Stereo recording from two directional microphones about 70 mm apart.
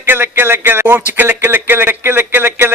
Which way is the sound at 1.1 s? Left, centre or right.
Right.